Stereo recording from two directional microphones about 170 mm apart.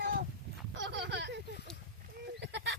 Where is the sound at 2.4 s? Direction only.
80° right.